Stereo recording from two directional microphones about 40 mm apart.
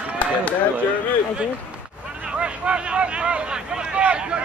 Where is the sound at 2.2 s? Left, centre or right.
Right.